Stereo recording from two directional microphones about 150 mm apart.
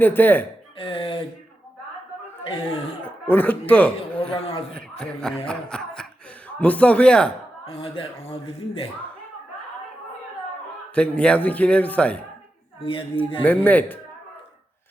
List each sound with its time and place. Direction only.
0.0 s a man's voice: 10° left (ahead or behind)
0.8 s a sound: 35° left (ahead or behind)
3.2 s a man's voice: 10° left (ahead or behind)
4.2 s a sound: 40° left (ahead or behind)
4.7 s a man's voice: 5° left (ahead or behind)
7.6 s a man's voice: 40° left (ahead or behind)
10.9 s a man's voice: 5° left (ahead or behind)
12.8 s a man's voice: 35° left (ahead or behind)
13.4 s a man's voice: 10° left (ahead or behind)